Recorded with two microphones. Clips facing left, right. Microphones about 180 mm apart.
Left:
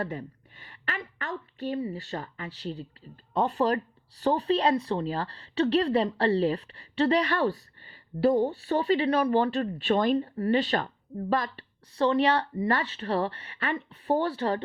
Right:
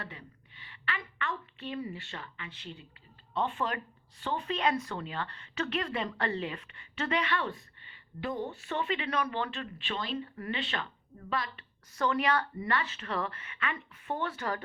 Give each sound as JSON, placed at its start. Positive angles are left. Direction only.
{"t": 0.0, "sound": "a woman's voice", "side_deg": 45}
{"t": 10.2, "sound": "speech", "side_deg": 35}
{"t": 11.9, "sound": "speech", "side_deg": 30}